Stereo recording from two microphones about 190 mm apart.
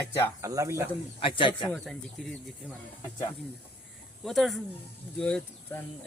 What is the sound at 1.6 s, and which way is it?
Speech, 5° left (ahead or behind).